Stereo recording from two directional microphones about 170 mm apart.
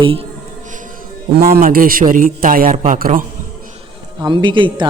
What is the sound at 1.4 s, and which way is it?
A man's voice, 65° right (ahead or behind).